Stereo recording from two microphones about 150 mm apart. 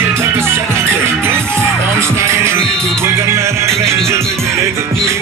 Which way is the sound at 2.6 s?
5° left (ahead or behind).